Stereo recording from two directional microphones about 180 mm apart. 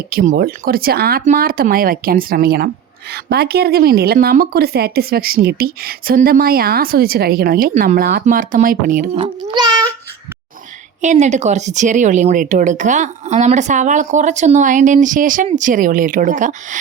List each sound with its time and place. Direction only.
0.1 s speech: 55° right (ahead or behind)
9.1 s a child's voice: 25° right (ahead or behind)
11.0 s speech: 40° right (ahead or behind)